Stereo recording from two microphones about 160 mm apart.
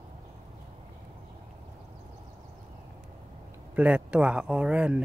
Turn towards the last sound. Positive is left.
turn(degrees=-5)  # may be behind; listen again after turning